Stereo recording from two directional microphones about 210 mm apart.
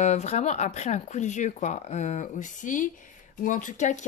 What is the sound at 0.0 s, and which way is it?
Speech, 30° left (ahead or behind).